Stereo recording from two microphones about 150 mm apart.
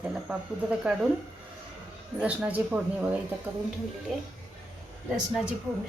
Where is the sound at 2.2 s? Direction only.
10° right (ahead or behind).